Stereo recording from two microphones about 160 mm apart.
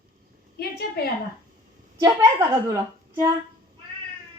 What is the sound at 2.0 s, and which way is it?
Speech, 20° right (ahead or behind).